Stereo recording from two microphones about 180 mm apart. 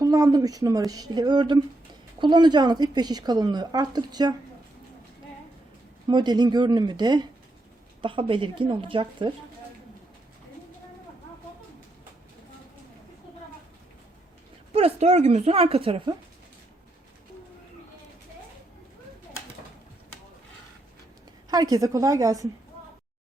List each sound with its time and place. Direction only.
0.0 s a woman's voice: 20° right (ahead or behind)
6.1 s a woman's voice: 25° right (ahead or behind)
14.7 s speech: 35° right (ahead or behind)
21.5 s a woman's voice: 20° right (ahead or behind)